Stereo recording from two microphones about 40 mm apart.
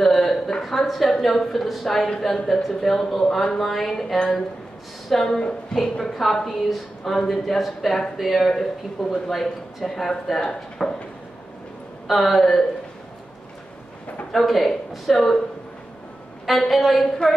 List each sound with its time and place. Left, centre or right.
0.0 s a sound: centre
0.6 s a woman's voice: centre
12.1 s a woman's voice: centre
14.3 s a woman's voice: centre
16.4 s a woman's voice: centre